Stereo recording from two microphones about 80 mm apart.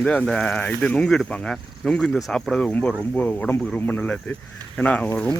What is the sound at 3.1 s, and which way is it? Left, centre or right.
Speech, centre.